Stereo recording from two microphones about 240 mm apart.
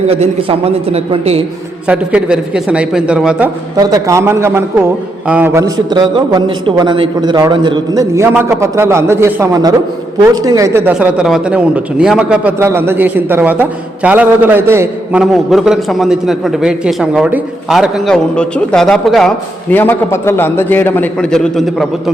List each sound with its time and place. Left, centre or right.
0.1 s a man's voice: right
1.9 s a man's voice: centre